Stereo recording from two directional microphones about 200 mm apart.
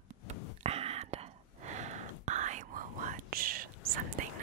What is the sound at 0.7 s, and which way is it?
Whispering, 30° right (ahead or behind).